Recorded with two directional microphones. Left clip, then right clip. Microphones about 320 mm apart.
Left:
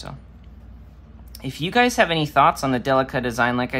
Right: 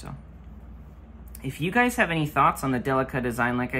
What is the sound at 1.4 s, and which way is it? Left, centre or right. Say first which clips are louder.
Speech: left 4 dB; centre.